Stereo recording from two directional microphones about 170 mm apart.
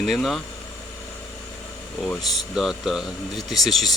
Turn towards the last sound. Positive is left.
turn(degrees=0)  # may be behind; listen again after turning